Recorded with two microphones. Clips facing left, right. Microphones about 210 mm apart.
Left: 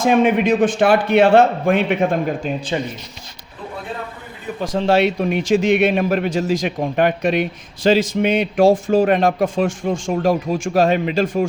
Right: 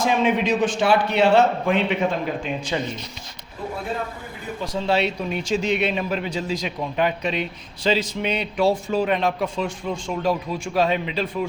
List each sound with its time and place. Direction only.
0.0 s a man's voice: 55° left (ahead or behind)
2.7 s speech: 30° left (ahead or behind)
4.6 s speech: 90° left
4.9 s a man's voice: 50° left (ahead or behind)